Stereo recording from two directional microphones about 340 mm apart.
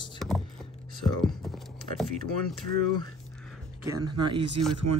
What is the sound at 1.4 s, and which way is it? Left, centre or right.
Speech, centre.